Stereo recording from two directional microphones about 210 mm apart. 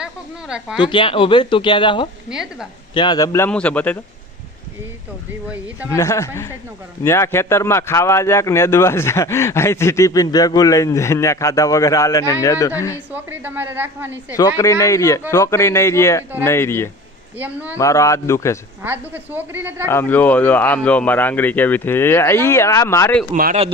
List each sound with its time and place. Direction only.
0.0 s speech: 5° right (ahead or behind)
0.8 s speech: 25° left (ahead or behind)
2.3 s a woman's voice: 5° right (ahead or behind)
2.9 s a man's voice: 20° left (ahead or behind)
5.9 s a man's voice: 15° left (ahead or behind)
13.1 s a woman's voice: 10° right (ahead or behind)
14.3 s a man's voice: 15° left (ahead or behind)
17.3 s a woman's voice: 10° right (ahead or behind)
17.7 s a man's voice: 15° left (ahead or behind)
18.8 s a woman's voice: 10° right (ahead or behind)
19.9 s a man's voice: 10° left (ahead or behind)
23.3 s a man's voice: 40° right (ahead or behind)